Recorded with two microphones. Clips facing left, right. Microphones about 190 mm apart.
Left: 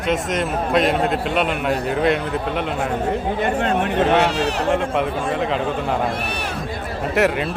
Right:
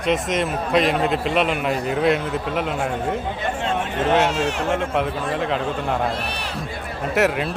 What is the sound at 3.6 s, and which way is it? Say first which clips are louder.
Speech: left 3 dB; 60° left (ahead or behind).